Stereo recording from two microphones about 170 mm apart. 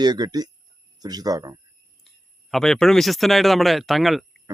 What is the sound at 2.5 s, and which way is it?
Speech, 5° left (ahead or behind).